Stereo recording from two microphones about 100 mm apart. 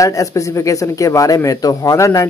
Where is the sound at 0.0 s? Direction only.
30° left (ahead or behind).